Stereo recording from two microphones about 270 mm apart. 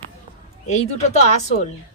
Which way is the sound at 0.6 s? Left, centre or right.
Left.